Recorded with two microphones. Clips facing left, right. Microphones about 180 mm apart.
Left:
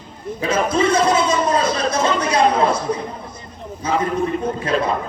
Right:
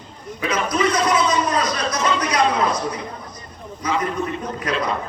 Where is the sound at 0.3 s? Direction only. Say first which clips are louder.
Left 3 dB; 30° left (ahead or behind).